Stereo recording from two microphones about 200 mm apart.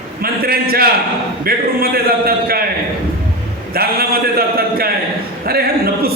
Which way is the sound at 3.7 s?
50° right (ahead or behind).